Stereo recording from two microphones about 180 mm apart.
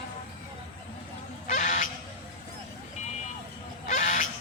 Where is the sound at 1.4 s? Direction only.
45° left (ahead or behind).